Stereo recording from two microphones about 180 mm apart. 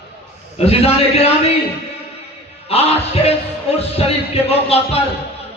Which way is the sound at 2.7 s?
35° left (ahead or behind).